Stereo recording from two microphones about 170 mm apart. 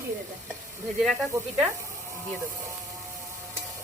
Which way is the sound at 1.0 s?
Centre (ahead or behind).